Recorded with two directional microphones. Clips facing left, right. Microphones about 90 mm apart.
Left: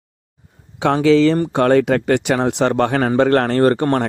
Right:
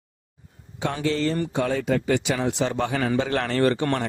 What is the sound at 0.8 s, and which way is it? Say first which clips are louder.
Speech: left 12 dB; 90° left.